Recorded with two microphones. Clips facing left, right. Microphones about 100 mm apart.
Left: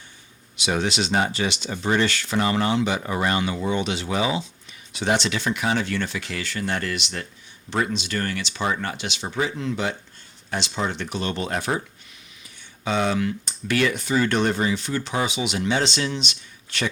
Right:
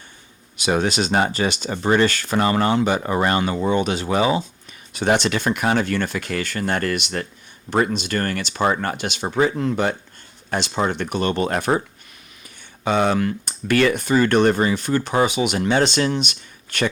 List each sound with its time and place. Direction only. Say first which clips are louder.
0.5 s speech: right 4 dB; 45° right (ahead or behind)
12.8 s speech: right 4 dB; 55° right (ahead or behind)